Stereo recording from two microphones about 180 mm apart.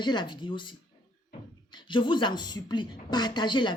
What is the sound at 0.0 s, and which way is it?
Speech, 25° left (ahead or behind).